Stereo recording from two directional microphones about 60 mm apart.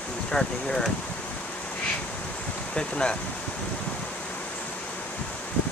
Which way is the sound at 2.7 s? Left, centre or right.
Centre.